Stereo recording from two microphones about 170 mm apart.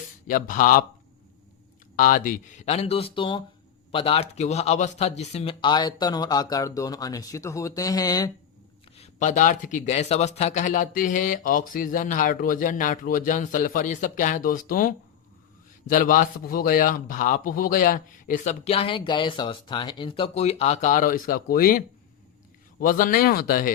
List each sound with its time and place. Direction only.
0.3 s speech: 50° left (ahead or behind)
2.0 s speech: 55° left (ahead or behind); by 8.3 s 20° left (ahead or behind)
9.0 s speech: 45° left (ahead or behind)
18.6 s speech: 35° left (ahead or behind); by 23.7 s 60° left (ahead or behind)